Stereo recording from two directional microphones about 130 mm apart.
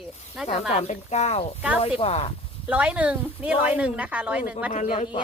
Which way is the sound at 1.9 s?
50° left (ahead or behind).